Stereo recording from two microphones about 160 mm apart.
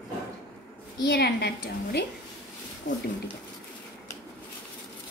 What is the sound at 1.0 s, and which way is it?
Speech, 90° left.